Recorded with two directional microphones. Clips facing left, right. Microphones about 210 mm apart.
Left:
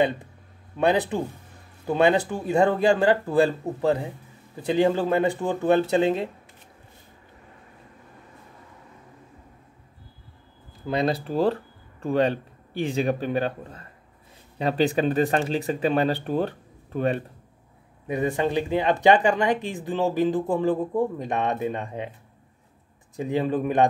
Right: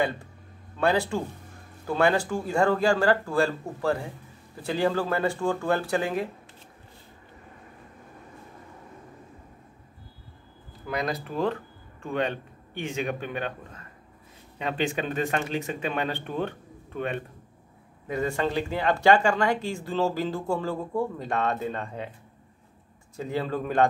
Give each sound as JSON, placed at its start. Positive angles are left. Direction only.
{"t": 0.7, "sound": "speech", "side_deg": 20}
{"t": 10.9, "sound": "speech", "side_deg": 30}
{"t": 18.0, "sound": "speech", "side_deg": 20}
{"t": 23.1, "sound": "speech", "side_deg": 15}